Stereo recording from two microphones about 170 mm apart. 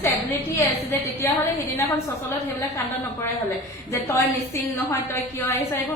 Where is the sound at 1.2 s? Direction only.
15° left (ahead or behind).